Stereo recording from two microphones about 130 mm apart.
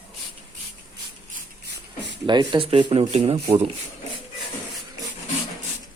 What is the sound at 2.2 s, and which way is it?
Speech, 40° right (ahead or behind).